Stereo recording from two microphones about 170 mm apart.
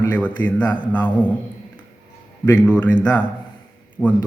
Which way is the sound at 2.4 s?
10° left (ahead or behind).